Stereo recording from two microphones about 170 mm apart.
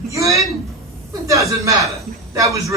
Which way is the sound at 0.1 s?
20° right (ahead or behind).